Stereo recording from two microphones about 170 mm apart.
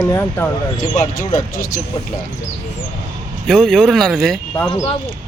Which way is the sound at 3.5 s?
Centre (ahead or behind).